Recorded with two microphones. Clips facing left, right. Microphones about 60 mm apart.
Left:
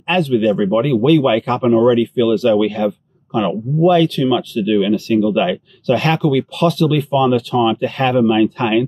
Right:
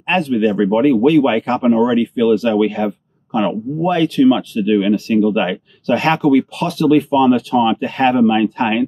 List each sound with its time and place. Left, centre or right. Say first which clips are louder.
0.1 s speech: left 1 dB; right